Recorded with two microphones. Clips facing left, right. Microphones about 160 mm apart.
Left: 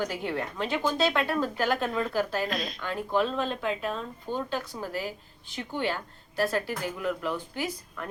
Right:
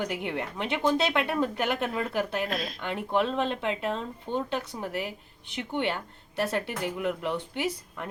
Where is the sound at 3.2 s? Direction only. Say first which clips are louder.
Right 1 dB; 20° right (ahead or behind).